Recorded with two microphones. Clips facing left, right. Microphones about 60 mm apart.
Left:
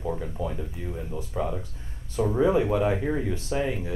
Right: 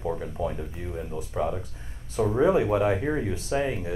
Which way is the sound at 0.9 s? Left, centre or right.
Centre.